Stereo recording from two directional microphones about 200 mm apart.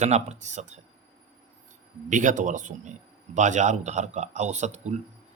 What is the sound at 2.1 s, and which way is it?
Speech, 40° right (ahead or behind).